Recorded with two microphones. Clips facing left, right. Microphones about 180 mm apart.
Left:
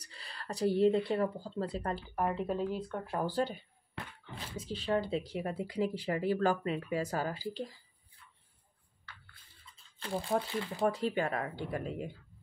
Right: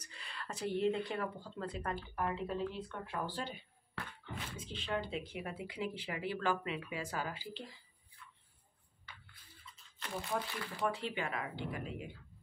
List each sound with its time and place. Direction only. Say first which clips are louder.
0.0 s speech: even; 35° left (ahead or behind)
4.6 s speech: left 8 dB; 40° left (ahead or behind)
9.1 s a sound: left 1 dB; 15° right (ahead or behind)
9.9 s speech: left 6 dB; 30° left (ahead or behind)
10.9 s speech: left 7 dB; 40° left (ahead or behind)